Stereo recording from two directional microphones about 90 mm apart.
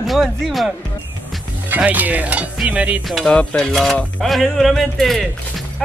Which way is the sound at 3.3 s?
10° left (ahead or behind).